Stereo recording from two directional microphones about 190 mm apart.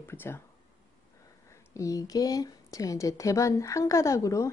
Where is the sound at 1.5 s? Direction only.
15° left (ahead or behind).